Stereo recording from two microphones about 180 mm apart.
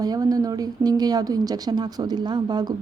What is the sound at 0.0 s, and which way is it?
Speech, 20° right (ahead or behind).